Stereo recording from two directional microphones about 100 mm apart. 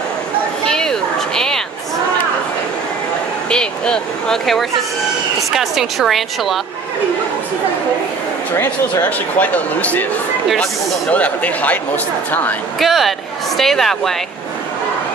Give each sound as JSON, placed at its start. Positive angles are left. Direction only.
{"t": 0.7, "sound": "a sound", "side_deg": 5}
{"t": 3.4, "sound": "a sound", "side_deg": 10}
{"t": 5.5, "sound": "a woman's voice", "side_deg": 0}
{"t": 8.5, "sound": "speech", "side_deg": 20}
{"t": 11.1, "sound": "speech", "side_deg": 15}
{"t": 12.7, "sound": "a woman's voice", "side_deg": 0}